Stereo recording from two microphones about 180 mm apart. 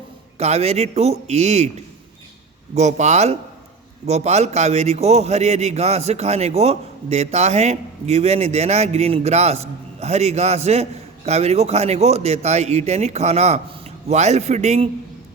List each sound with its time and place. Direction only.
0.3 s a man's voice: 35° right (ahead or behind)
2.7 s a man's voice: 40° right (ahead or behind)